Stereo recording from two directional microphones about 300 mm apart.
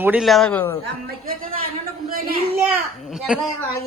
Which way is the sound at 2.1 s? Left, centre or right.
Right.